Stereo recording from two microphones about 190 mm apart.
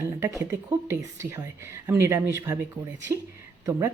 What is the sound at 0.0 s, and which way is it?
A woman's voice, 15° right (ahead or behind).